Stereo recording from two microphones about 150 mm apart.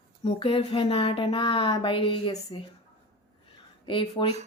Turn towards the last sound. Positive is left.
turn(degrees=35)  # may be behind; listen again after turning